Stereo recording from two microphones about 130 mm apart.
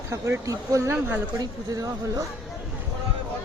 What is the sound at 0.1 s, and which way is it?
Speech, 25° right (ahead or behind).